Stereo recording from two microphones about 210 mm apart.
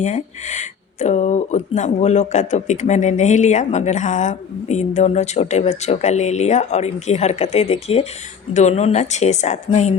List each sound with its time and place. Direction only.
0.0 s speech: 35° left (ahead or behind)